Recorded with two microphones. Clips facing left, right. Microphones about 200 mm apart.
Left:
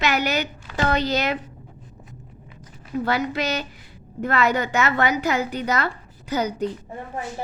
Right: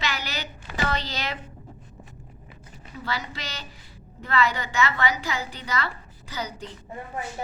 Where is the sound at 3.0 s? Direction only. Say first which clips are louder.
Left 9 dB; 55° left (ahead or behind).